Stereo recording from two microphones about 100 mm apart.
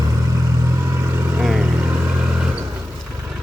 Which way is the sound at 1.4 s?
10° right (ahead or behind).